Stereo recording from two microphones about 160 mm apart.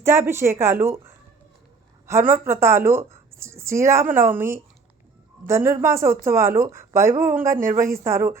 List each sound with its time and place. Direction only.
0.0 s speech: 15° right (ahead or behind)
7.5 s speech: 55° right (ahead or behind)
7.9 s speech: 15° right (ahead or behind)